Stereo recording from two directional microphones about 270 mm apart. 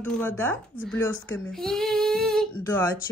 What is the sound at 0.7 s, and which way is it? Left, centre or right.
Speech, left.